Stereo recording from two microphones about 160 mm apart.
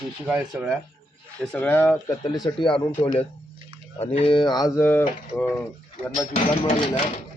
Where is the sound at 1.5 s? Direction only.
10° left (ahead or behind).